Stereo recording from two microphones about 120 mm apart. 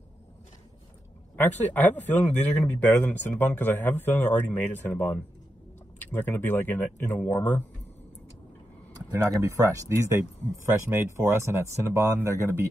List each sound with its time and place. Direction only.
1.3 s speech: 15° left (ahead or behind)
9.1 s speech: 25° right (ahead or behind)